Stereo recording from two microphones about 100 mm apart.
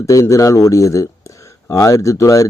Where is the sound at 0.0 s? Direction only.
35° left (ahead or behind).